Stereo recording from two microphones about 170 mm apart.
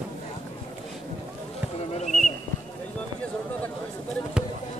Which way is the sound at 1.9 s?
45° left (ahead or behind).